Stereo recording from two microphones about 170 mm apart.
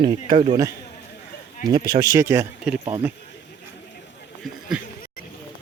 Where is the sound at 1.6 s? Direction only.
25° right (ahead or behind).